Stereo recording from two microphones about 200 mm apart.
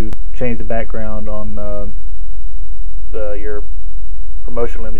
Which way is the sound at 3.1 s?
15° left (ahead or behind).